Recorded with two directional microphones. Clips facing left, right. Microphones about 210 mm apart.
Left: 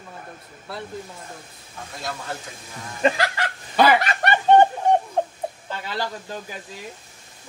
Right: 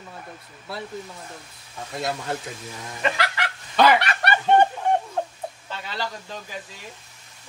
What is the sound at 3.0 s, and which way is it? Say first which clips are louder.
Fowl: left 5 dB; 40° left (ahead or behind).